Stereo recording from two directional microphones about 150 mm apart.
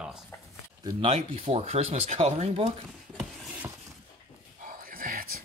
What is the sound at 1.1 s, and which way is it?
Speech, 45° right (ahead or behind).